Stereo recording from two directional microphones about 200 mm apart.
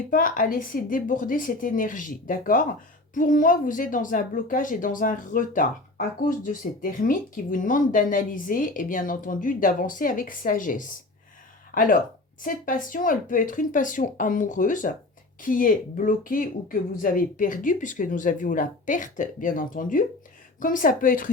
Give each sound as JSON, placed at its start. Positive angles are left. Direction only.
{"t": 0.1, "sound": "a woman's voice", "side_deg": 45}